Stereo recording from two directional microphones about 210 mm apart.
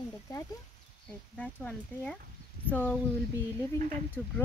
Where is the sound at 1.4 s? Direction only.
5° left (ahead or behind).